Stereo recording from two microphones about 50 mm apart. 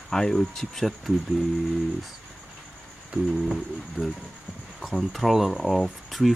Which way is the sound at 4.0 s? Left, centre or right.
Right.